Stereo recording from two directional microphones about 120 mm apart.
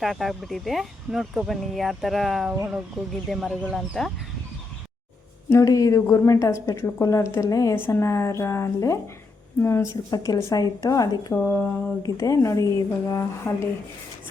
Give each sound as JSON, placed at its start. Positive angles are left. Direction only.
{"t": 0.0, "sound": "speech", "side_deg": 0}
{"t": 5.5, "sound": "a woman's voice", "side_deg": 25}
{"t": 10.1, "sound": "speech", "side_deg": 30}
{"t": 11.3, "sound": "speech", "side_deg": 15}
{"t": 12.0, "sound": "a woman's voice", "side_deg": 30}